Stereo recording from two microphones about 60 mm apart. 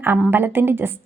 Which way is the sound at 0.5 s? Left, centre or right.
Right.